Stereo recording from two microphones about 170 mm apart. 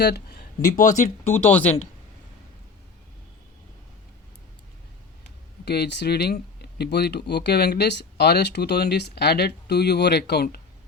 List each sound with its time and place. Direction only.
0.0 s speech: 70° left (ahead or behind)
0.6 s speech: 45° left (ahead or behind)
1.2 s speech: 10° left (ahead or behind)
5.6 s speech: 75° left (ahead or behind)